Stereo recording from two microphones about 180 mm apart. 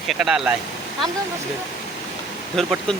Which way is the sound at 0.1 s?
5° right (ahead or behind).